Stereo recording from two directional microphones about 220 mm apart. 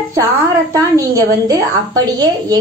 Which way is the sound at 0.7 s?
15° right (ahead or behind).